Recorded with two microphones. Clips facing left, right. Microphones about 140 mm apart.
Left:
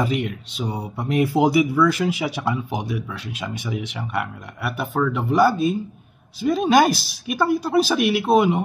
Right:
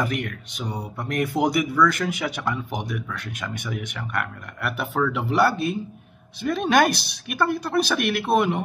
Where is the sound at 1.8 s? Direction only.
10° left (ahead or behind).